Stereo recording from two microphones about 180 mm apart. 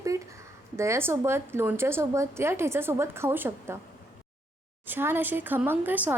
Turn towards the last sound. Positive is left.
turn(degrees=-10)  # may be behind; listen again after turning